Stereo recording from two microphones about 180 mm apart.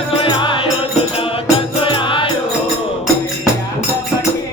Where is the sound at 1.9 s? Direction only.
30° left (ahead or behind).